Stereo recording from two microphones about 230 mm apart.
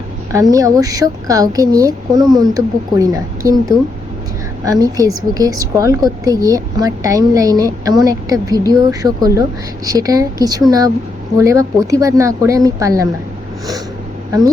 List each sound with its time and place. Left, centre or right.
0.5 s a woman's voice: centre